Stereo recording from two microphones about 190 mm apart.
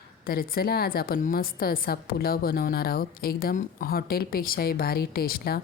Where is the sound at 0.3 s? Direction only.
50° left (ahead or behind).